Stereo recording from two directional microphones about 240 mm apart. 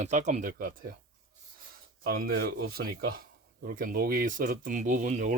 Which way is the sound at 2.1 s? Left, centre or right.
Right.